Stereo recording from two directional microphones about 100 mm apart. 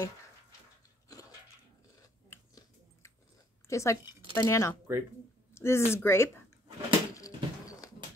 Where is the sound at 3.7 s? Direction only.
30° left (ahead or behind).